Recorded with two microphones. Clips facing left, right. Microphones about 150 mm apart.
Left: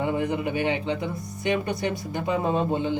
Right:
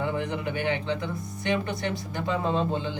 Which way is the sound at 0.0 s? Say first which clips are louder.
Left 3 dB; 15° left (ahead or behind).